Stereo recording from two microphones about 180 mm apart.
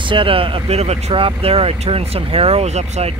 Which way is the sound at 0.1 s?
30° right (ahead or behind).